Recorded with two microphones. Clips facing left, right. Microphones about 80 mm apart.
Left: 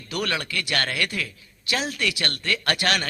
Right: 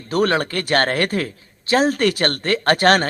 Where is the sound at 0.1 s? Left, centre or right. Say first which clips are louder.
Right 9 dB; right.